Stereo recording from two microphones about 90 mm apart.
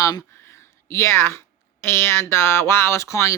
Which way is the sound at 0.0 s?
40° left (ahead or behind).